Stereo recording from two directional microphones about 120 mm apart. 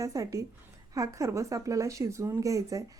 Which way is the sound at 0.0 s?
30° right (ahead or behind).